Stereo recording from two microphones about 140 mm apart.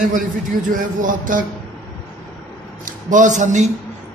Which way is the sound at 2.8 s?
65° right (ahead or behind).